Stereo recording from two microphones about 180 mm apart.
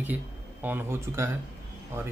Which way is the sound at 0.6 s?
10° right (ahead or behind).